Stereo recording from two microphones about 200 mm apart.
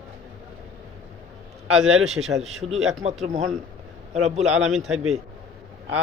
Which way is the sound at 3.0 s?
35° right (ahead or behind).